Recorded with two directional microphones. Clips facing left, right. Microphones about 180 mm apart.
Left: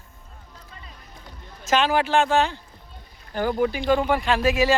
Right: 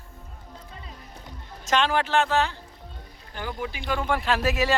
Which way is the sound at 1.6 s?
5° left (ahead or behind).